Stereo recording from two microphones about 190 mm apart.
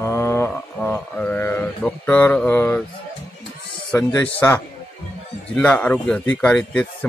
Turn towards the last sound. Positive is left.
turn(degrees=10)  # may be behind; listen again after turning